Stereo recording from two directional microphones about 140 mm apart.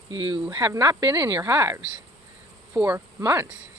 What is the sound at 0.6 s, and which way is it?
Speech, 25° right (ahead or behind).